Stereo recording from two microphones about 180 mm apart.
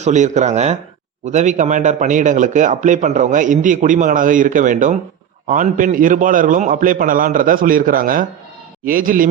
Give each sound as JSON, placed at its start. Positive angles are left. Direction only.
{"t": 0.0, "sound": "a man's voice", "side_deg": -40}